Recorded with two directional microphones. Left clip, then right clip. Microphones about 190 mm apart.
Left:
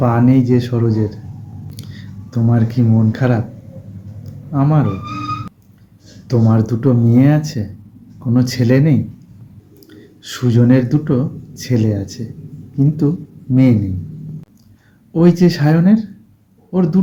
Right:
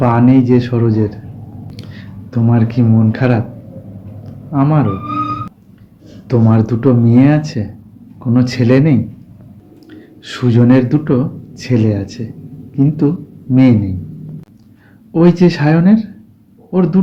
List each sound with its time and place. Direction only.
0.0 s speech: 20° left (ahead or behind)
4.5 s speech: 25° left (ahead or behind)
6.2 s speech: 20° left (ahead or behind)
15.1 s speech: 25° left (ahead or behind)